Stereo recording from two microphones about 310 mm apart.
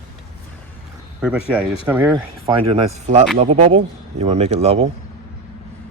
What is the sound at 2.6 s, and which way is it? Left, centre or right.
Speech, centre.